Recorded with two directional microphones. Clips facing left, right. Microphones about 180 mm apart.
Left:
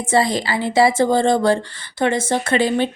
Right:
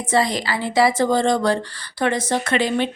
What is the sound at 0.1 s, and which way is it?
A woman's voice, 30° left (ahead or behind).